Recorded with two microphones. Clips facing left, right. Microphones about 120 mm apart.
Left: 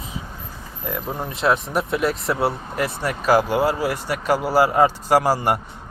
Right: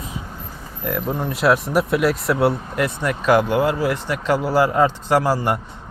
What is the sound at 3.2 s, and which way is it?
Speech, 5° left (ahead or behind).